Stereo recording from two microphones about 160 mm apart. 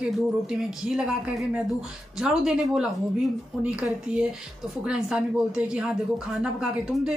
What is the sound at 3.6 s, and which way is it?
A woman's voice, 5° right (ahead or behind).